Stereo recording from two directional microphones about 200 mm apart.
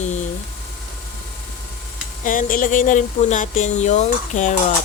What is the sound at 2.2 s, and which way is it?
Speech, 45° left (ahead or behind).